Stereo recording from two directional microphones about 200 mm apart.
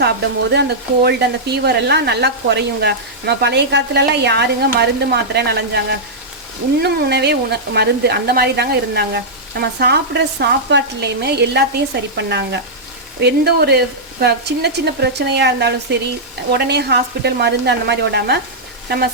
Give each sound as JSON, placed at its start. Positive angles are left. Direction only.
{"t": 0.0, "sound": "speech", "side_deg": -55}